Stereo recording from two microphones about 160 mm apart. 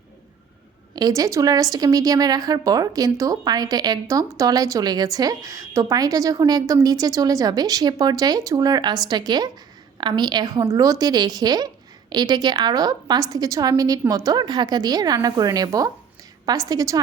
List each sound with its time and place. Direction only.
0.9 s a woman's voice: 20° right (ahead or behind)